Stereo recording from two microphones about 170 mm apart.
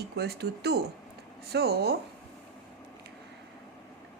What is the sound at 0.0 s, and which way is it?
A woman's voice, 75° right (ahead or behind).